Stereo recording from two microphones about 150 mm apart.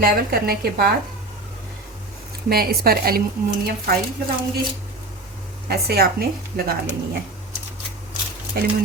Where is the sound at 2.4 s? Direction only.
90° right.